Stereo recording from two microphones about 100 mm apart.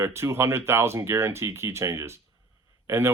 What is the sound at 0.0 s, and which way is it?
Speech, 30° right (ahead or behind).